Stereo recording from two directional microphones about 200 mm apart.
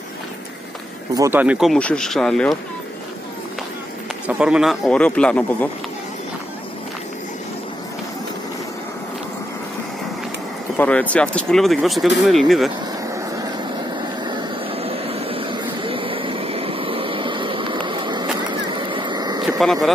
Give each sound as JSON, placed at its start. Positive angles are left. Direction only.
{"t": 1.1, "sound": "speech", "side_deg": -15}
{"t": 4.3, "sound": "speech", "side_deg": -5}
{"t": 10.8, "sound": "speech", "side_deg": 5}
{"t": 13.1, "sound": "vehicle", "side_deg": -20}
{"t": 19.6, "sound": "speech", "side_deg": 0}